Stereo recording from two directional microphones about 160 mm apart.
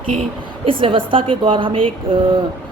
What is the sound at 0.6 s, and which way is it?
Speech, 35° right (ahead or behind).